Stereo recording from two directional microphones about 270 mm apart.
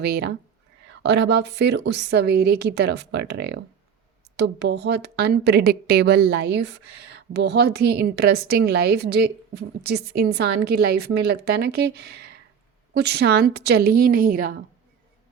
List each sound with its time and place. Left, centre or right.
0.0 s a woman's voice: right